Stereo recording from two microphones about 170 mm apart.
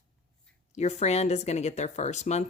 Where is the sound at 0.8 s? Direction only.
40° left (ahead or behind).